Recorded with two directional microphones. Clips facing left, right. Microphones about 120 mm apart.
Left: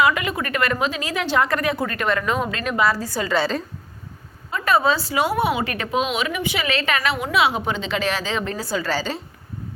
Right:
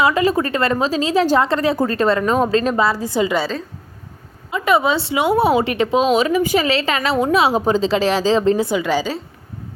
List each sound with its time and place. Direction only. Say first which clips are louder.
0.0 s a woman's voice: right 5 dB; 30° right (ahead or behind)
4.5 s a woman's voice: right 3 dB; 20° right (ahead or behind)
5.4 s a woman's voice: right 6 dB; 35° right (ahead or behind)
6.7 s a woman's voice: right 4 dB; 30° right (ahead or behind)
8.5 s a woman's voice: right 6 dB; 20° right (ahead or behind)